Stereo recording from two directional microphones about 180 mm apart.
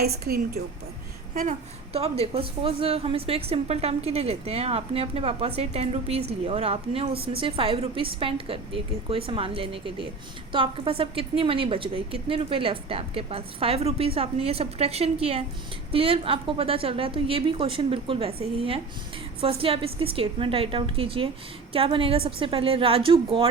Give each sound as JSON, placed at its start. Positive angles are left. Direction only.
{"t": 0.0, "sound": "a woman's voice", "side_deg": -60}
{"t": 1.3, "sound": "a woman's voice", "side_deg": -45}